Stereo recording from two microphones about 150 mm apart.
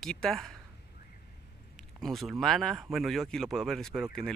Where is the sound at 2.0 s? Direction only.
Centre (ahead or behind).